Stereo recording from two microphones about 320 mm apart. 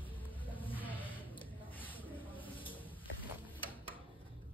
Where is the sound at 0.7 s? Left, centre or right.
Centre.